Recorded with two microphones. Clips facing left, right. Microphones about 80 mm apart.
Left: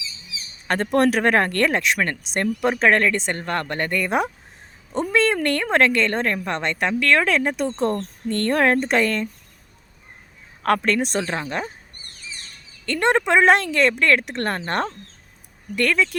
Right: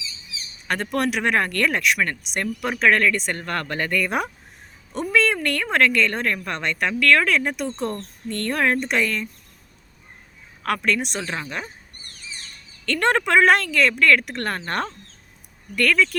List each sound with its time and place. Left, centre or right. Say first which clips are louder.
0.7 s a woman's voice: left 5 dB; left
10.6 s a woman's voice: left 3 dB; left
12.8 s speech: left 1 dB; centre